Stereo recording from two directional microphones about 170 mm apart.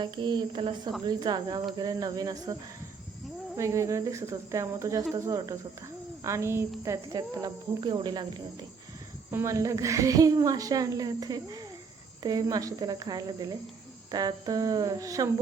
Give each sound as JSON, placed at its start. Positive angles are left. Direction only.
{"t": 0.0, "sound": "a woman's voice", "side_deg": -25}